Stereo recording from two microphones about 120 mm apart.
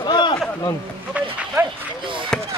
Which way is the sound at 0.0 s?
40° left (ahead or behind).